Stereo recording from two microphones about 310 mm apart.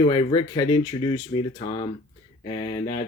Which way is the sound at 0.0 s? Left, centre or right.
Centre.